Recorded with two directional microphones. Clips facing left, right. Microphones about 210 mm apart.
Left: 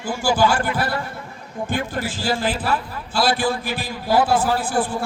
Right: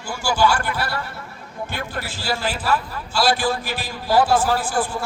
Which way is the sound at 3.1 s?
55° left (ahead or behind).